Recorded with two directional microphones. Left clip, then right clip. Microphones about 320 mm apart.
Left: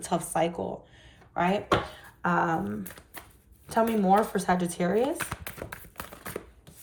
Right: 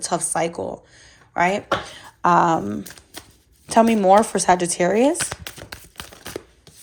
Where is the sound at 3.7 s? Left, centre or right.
Centre.